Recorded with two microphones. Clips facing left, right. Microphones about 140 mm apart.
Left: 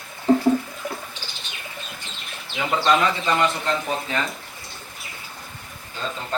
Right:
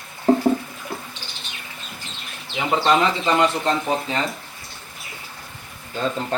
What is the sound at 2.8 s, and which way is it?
Speech, 25° right (ahead or behind).